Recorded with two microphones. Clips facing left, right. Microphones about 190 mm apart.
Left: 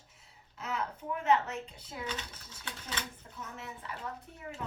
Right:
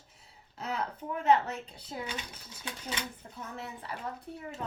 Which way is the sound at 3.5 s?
35° right (ahead or behind).